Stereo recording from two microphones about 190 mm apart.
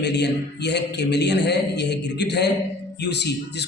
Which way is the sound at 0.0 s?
65° left (ahead or behind).